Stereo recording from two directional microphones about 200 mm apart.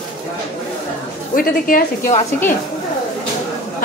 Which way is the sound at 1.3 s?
45° left (ahead or behind).